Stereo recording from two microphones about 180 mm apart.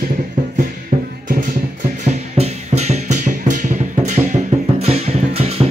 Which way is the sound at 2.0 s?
35° right (ahead or behind).